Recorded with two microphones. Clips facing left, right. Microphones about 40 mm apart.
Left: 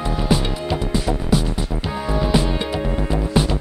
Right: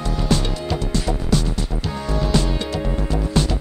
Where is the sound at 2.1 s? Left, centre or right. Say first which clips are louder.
Left 2 dB; centre.